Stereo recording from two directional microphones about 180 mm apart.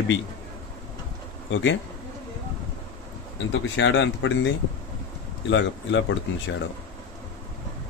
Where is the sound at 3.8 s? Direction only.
90° left.